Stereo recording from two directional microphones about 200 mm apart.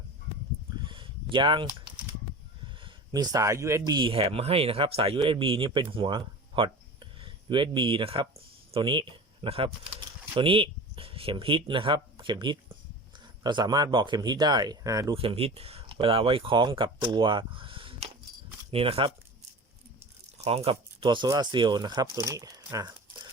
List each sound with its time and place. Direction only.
0.8 s a sound: 25° right (ahead or behind)
2.8 s speech: 20° right (ahead or behind)
20.4 s speech: 30° right (ahead or behind)